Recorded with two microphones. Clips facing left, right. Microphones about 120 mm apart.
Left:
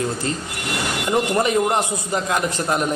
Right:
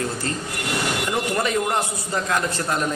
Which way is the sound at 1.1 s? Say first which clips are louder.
Left 6 dB; 20° left (ahead or behind).